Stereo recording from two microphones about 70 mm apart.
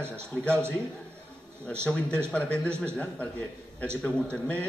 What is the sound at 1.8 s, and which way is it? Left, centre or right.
A man's voice, centre.